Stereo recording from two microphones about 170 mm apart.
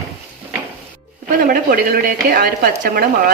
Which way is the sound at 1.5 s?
60° right (ahead or behind).